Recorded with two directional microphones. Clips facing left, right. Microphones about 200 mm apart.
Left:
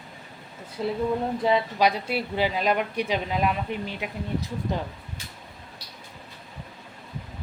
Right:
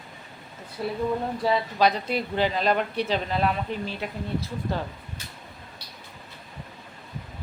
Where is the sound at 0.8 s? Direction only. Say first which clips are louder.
Left 1 dB; 20° left (ahead or behind).